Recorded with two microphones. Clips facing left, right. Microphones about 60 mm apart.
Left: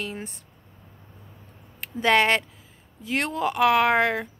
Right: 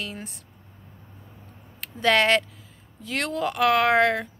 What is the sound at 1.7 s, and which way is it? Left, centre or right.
Speech, centre.